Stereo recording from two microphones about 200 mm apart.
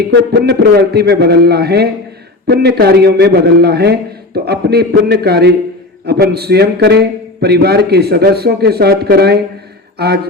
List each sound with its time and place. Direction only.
0.1 s a man's voice: 55° right (ahead or behind)